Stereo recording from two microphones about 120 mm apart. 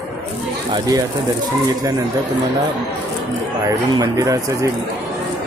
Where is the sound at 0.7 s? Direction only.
30° right (ahead or behind).